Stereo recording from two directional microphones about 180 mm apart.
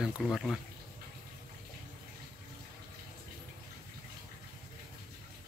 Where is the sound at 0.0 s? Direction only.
Centre (ahead or behind).